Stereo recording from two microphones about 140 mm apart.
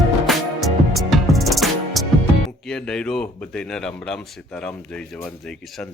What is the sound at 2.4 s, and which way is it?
Speech, 5° left (ahead or behind).